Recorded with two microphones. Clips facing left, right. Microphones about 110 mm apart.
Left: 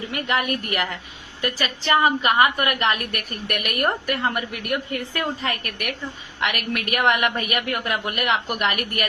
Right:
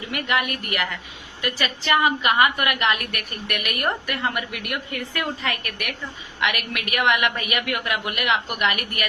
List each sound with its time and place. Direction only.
0.1 s a woman's voice: 35° left (ahead or behind)